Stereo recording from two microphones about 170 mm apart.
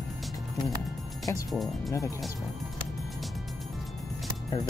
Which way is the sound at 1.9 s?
20° left (ahead or behind).